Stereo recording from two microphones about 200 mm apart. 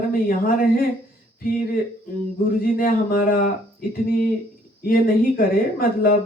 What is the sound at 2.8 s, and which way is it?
Speech, 45° left (ahead or behind).